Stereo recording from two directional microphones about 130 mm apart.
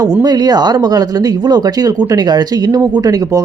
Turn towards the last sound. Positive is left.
turn(degrees=-30)  # may be behind; listen again after turning